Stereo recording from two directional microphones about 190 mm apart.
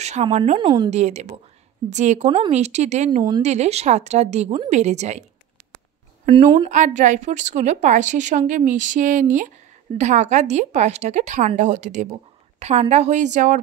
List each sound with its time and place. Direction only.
0.0 s a woman's voice: 35° right (ahead or behind)
2.2 s speech: 25° right (ahead or behind)
2.5 s a woman's voice: 35° right (ahead or behind)
3.2 s speech: 20° right (ahead or behind)
3.4 s a woman's voice: 35° right (ahead or behind)
6.7 s a woman's voice: 40° right (ahead or behind)